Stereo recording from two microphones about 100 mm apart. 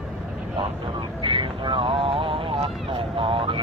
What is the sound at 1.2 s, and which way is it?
Vehicle, 55° right (ahead or behind).